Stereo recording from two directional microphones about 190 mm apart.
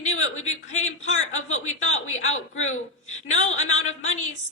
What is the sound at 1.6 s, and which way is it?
Speech, 35° left (ahead or behind).